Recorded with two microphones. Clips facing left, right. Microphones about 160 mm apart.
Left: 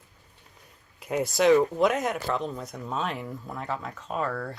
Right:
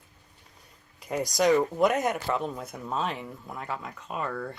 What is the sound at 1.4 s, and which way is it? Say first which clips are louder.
Speech: left 2 dB; centre (ahead or behind).